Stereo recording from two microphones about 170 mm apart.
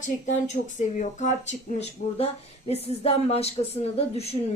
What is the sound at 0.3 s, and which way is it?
Speech, 45° left (ahead or behind).